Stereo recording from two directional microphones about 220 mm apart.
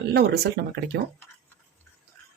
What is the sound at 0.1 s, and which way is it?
Speech, 50° right (ahead or behind).